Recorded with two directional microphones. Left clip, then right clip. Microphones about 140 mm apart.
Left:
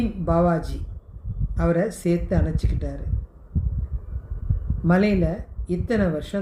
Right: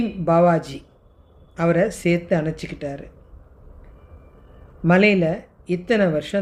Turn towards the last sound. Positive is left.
turn(degrees=-55)  # may be behind; listen again after turning